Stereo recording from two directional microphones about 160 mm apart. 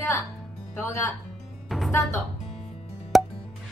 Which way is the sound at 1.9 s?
15° left (ahead or behind).